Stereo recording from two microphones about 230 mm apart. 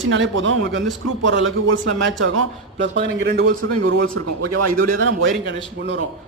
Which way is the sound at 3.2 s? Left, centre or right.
Right.